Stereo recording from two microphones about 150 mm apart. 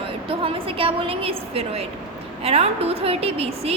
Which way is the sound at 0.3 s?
35° right (ahead or behind).